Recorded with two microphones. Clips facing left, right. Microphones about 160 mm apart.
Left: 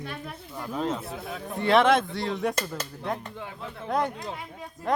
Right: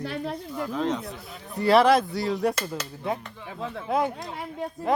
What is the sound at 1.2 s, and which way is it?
Speech, 70° left (ahead or behind).